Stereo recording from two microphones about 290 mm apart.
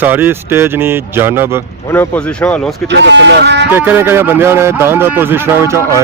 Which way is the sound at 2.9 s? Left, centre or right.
Right.